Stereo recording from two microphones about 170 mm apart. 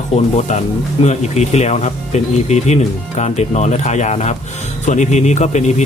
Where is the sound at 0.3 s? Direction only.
45° left (ahead or behind).